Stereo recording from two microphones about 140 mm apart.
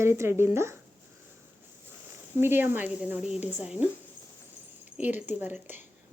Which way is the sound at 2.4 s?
15° right (ahead or behind).